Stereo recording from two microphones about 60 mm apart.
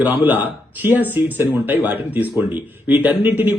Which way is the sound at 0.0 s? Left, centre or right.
Right.